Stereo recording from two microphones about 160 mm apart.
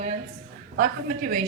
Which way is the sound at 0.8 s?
55° right (ahead or behind).